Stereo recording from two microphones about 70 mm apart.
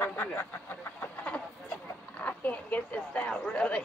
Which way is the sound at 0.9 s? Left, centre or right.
Left.